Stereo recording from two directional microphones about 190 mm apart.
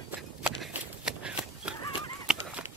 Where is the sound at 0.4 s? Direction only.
5° right (ahead or behind).